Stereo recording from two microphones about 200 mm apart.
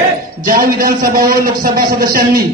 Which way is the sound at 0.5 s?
45° right (ahead or behind).